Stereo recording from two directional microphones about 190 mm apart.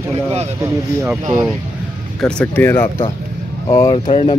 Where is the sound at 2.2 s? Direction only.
5° left (ahead or behind).